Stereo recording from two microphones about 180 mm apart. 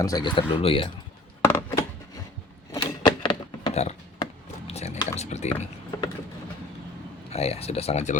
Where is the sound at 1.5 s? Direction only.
15° left (ahead or behind); by 5.5 s 40° left (ahead or behind).